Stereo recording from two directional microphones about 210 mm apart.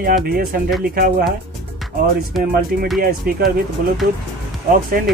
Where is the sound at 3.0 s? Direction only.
45° right (ahead or behind).